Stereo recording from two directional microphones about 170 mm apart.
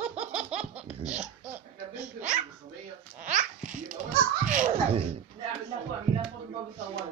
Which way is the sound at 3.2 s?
45° right (ahead or behind).